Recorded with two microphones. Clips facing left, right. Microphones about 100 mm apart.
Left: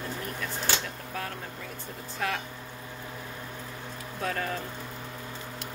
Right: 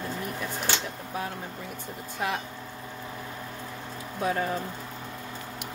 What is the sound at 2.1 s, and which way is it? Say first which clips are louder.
Speech: right 1 dB; 20° right (ahead or behind).